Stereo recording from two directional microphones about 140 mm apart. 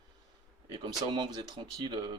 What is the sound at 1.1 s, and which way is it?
Speech, 30° right (ahead or behind).